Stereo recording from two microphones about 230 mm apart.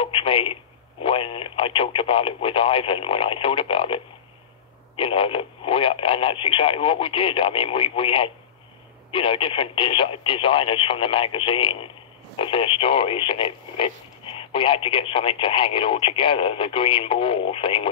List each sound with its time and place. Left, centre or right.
0.0 s telephone: left
1.0 s speech: left